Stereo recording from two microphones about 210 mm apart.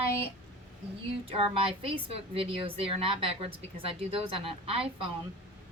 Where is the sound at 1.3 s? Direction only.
25° right (ahead or behind).